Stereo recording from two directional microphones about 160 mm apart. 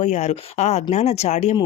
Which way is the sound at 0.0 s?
45° left (ahead or behind).